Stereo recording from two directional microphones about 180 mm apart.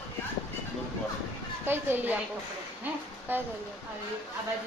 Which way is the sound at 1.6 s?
10° right (ahead or behind).